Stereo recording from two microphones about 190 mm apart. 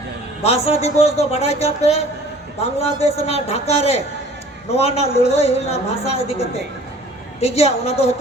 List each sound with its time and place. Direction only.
0.4 s a woman's voice: 35° left (ahead or behind)